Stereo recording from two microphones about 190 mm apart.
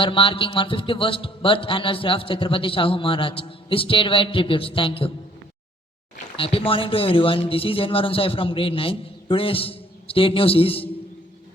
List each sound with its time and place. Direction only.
0.0 s speech: 25° left (ahead or behind)
6.3 s speech: 30° left (ahead or behind)